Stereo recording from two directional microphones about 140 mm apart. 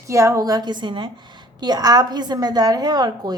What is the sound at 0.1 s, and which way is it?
A woman's voice, 20° right (ahead or behind).